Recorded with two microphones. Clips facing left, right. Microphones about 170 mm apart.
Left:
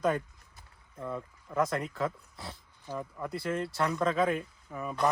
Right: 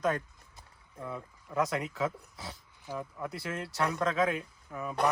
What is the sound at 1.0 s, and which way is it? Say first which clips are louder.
Speech: left 3 dB; centre (ahead or behind).